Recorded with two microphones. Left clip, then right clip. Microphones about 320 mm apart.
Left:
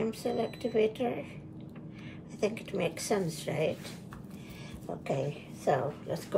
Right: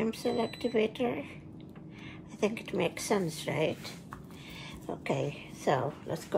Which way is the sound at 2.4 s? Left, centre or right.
Right.